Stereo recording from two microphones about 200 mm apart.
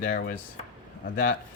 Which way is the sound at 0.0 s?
45° left (ahead or behind).